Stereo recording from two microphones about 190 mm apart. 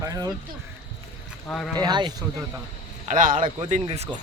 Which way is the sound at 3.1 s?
45° right (ahead or behind).